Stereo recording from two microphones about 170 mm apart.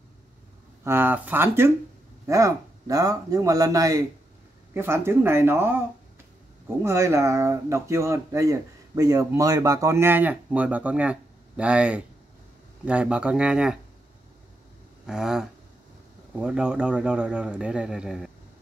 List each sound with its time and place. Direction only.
0.8 s speech: 10° right (ahead or behind)
6.8 s speech: 15° right (ahead or behind)
15.0 s speech: 5° right (ahead or behind)